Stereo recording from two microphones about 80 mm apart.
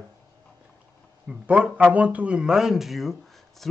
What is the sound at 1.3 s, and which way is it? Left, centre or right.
Speech, centre.